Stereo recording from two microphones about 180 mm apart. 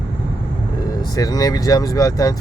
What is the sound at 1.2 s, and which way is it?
Speech, 20° left (ahead or behind).